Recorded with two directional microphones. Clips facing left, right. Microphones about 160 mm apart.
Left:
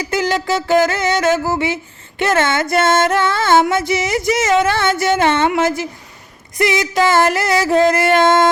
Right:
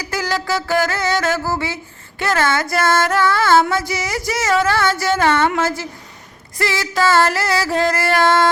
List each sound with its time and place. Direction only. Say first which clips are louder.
0.0 s music: left 4 dB; 20° left (ahead or behind)
5.5 s a woman's voice: left 3 dB; 20° left (ahead or behind)
6.6 s music: left 4 dB; 20° left (ahead or behind)